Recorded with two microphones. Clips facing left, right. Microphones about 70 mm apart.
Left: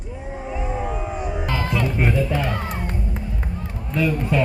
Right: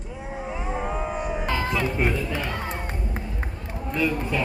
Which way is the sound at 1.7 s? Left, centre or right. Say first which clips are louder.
Left 4 dB; centre.